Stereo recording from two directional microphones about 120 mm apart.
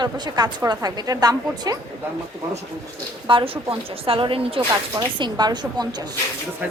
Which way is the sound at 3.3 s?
45° right (ahead or behind).